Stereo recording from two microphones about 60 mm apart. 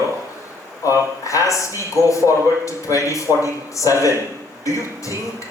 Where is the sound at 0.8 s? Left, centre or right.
Left.